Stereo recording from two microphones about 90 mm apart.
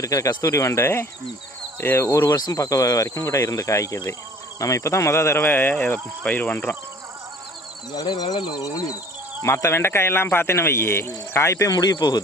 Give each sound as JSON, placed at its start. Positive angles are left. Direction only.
{"t": 0.0, "sound": "speech", "side_deg": 40}
{"t": 7.9, "sound": "speech", "side_deg": 50}
{"t": 9.4, "sound": "speech", "side_deg": 35}